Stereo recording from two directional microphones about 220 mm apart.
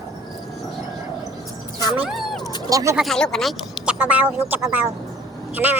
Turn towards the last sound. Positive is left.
turn(degrees=-10)  # may be behind; listen again after turning